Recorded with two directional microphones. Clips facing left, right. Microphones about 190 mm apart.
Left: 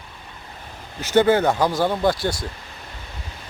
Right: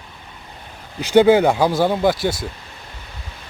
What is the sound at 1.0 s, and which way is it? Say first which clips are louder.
Speech: right 4 dB; 15° right (ahead or behind).